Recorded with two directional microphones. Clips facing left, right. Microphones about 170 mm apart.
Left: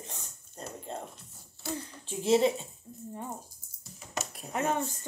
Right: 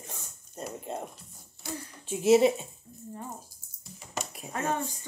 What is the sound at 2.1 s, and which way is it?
Speech, 10° right (ahead or behind).